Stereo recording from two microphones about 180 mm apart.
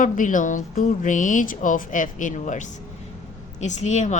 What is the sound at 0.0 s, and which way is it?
Speech, 45° left (ahead or behind).